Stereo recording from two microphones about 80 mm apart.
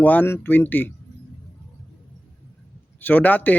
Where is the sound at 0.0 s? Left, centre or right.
Centre.